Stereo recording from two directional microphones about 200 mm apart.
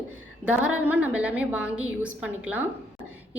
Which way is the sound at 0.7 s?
10° right (ahead or behind).